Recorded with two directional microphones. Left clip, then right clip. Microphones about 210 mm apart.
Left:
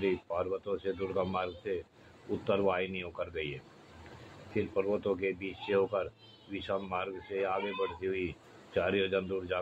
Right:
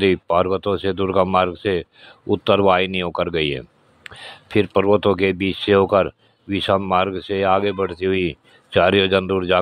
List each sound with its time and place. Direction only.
0.0 s speech: 55° right (ahead or behind)